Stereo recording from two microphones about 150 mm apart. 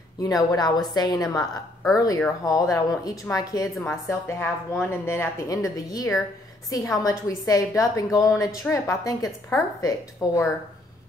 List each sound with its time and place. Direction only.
0.2 s a woman's voice: 25° left (ahead or behind)